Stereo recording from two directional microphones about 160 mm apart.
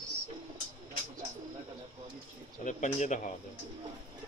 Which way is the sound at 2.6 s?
50° left (ahead or behind).